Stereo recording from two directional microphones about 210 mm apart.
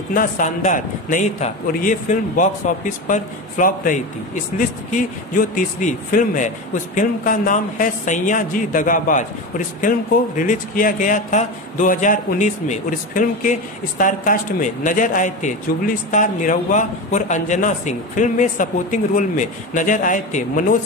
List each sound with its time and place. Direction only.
0.1 s speech: 40° left (ahead or behind)